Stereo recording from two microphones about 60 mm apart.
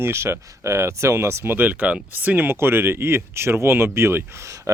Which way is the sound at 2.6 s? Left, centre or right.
Right.